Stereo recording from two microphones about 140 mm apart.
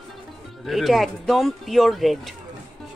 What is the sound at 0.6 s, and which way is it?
Speech, centre (ahead or behind).